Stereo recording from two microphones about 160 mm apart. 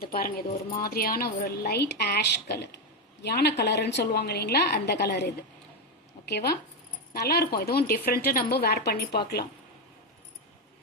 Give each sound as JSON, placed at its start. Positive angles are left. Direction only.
{"t": 0.0, "sound": "a woman's voice", "side_deg": 70}